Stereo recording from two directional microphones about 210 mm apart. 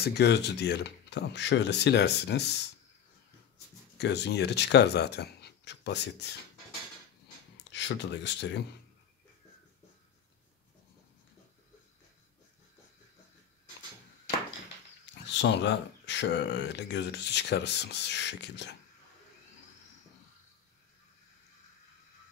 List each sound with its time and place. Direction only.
0.0 s speech: 50° left (ahead or behind)
4.0 s speech: 55° left (ahead or behind)
7.7 s speech: 55° left (ahead or behind)
15.2 s speech: 55° left (ahead or behind)